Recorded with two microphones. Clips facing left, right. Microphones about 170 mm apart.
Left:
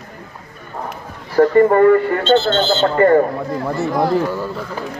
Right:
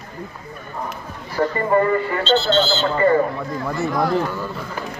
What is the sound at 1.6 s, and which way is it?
A man's voice, 60° left (ahead or behind).